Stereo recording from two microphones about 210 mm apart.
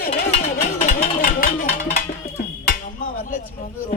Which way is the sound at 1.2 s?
40° left (ahead or behind).